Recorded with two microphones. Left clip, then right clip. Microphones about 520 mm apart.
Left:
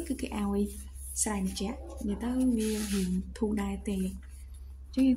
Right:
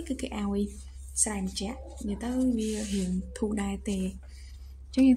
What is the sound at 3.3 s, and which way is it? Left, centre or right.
Speech, left.